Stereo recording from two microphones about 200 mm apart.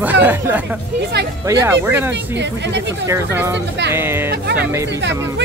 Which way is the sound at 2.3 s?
60° right (ahead or behind).